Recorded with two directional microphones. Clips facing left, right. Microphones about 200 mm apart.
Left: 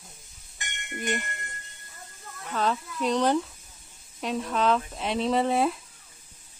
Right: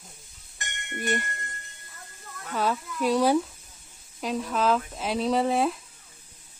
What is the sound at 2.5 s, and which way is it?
Speech, 5° right (ahead or behind).